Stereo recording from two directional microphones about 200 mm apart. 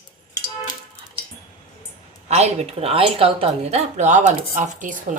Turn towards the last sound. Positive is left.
turn(degrees=-40)  # may be behind; listen again after turning